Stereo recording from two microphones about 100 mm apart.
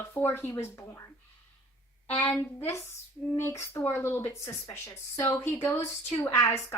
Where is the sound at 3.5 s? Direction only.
25° left (ahead or behind).